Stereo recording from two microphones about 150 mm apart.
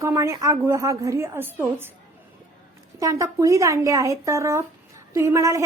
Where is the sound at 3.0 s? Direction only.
20° right (ahead or behind).